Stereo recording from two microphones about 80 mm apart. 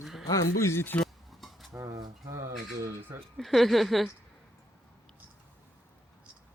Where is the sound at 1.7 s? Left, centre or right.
Right.